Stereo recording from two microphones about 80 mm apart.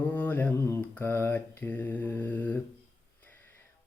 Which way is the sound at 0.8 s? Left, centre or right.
Left.